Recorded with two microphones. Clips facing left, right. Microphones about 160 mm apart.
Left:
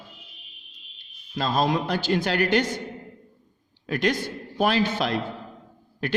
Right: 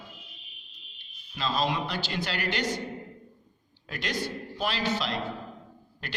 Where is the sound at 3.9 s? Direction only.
50° left (ahead or behind).